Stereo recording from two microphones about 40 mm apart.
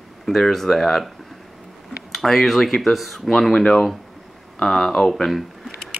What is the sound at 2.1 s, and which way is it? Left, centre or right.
Speech, centre.